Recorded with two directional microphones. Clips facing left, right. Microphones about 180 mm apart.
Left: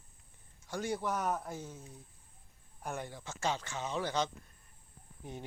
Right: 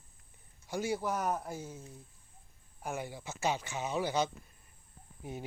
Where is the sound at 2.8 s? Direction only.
5° right (ahead or behind).